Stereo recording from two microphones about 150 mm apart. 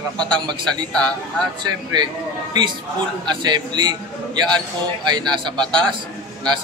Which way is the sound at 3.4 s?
30° right (ahead or behind).